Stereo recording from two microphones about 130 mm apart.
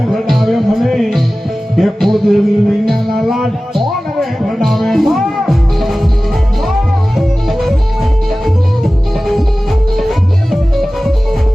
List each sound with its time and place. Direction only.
0.1 s music: centre (ahead or behind)
7.2 s music: centre (ahead or behind)
10.0 s music: centre (ahead or behind)